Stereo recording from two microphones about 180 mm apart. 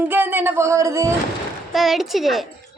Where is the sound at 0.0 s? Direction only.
10° right (ahead or behind).